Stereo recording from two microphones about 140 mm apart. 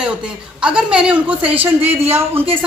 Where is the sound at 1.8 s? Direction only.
45° right (ahead or behind).